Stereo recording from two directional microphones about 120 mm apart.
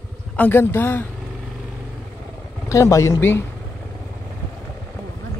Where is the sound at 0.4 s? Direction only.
20° left (ahead or behind).